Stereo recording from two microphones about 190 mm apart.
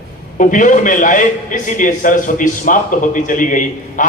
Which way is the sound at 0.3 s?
40° left (ahead or behind).